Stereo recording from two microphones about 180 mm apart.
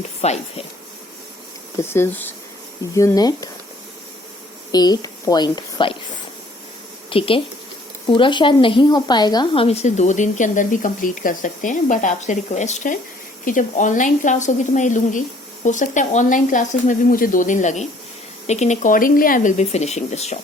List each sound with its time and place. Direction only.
0.2 s a woman's voice: 35° left (ahead or behind)
1.8 s speech: 15° left (ahead or behind)
4.7 s a woman's voice: 20° left (ahead or behind)
7.1 s a woman's voice: 30° left (ahead or behind)